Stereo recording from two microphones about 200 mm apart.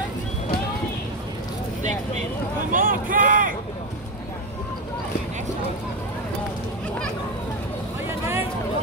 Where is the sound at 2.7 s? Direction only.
45° right (ahead or behind).